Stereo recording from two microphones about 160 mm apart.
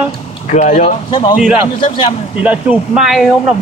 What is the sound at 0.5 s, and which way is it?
Speech, 45° left (ahead or behind).